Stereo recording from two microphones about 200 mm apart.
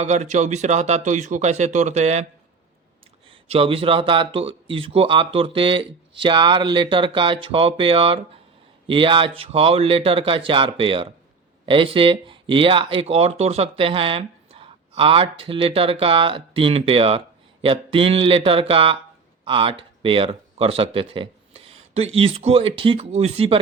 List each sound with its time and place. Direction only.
0.0 s speech: 35° right (ahead or behind)
3.2 s speech: 25° right (ahead or behind)